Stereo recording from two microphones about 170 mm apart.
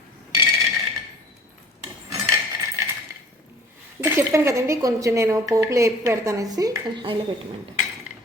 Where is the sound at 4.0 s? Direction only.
15° right (ahead or behind).